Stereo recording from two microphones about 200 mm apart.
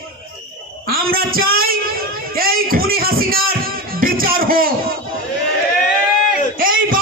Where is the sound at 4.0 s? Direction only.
45° right (ahead or behind).